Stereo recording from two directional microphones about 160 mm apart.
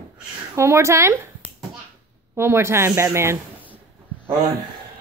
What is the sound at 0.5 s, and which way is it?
A woman's voice, 15° right (ahead or behind).